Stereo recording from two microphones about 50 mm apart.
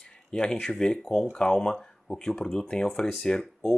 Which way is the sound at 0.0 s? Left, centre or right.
Centre.